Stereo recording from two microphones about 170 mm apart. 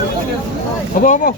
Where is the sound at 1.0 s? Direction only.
50° left (ahead or behind).